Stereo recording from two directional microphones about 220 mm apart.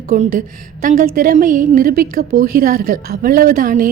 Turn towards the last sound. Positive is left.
turn(degrees=-40)  # may be behind; listen again after turning